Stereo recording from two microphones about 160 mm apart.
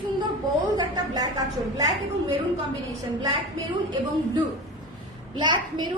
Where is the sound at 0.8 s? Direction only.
25° right (ahead or behind).